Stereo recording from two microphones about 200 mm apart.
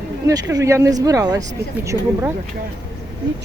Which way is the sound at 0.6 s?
15° right (ahead or behind).